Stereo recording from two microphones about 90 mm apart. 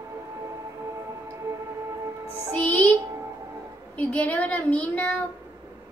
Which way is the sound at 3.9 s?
15° left (ahead or behind).